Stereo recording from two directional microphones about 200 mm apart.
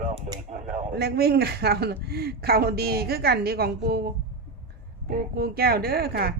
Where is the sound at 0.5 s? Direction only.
40° right (ahead or behind).